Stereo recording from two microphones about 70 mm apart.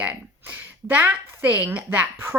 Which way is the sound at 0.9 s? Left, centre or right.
Right.